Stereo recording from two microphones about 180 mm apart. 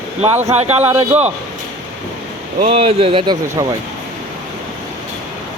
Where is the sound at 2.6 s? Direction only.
30° right (ahead or behind).